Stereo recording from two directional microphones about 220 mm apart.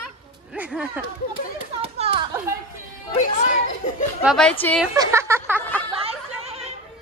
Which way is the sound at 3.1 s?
35° left (ahead or behind).